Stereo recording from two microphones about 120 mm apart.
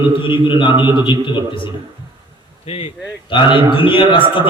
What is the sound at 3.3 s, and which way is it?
A man's voice, 45° left (ahead or behind).